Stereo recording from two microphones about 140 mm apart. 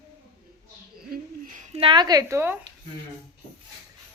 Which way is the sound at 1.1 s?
80° right.